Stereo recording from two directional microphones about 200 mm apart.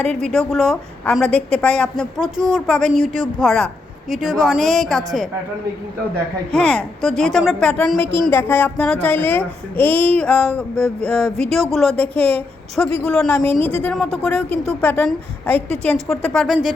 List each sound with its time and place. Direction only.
0.0 s a woman's voice: 5° left (ahead or behind)
6.5 s a woman's voice: 5° left (ahead or behind)
13.4 s a woman's voice: 25° right (ahead or behind)
13.8 s a woman's voice: centre (ahead or behind)